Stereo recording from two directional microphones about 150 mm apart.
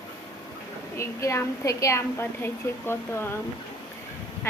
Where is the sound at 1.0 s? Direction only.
20° left (ahead or behind).